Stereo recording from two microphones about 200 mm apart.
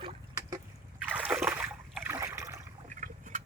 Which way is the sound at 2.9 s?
40° right (ahead or behind).